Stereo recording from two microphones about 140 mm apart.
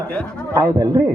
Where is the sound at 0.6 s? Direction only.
25° right (ahead or behind).